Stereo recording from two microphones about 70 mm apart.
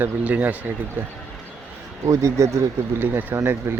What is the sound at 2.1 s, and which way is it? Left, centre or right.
Speech, right.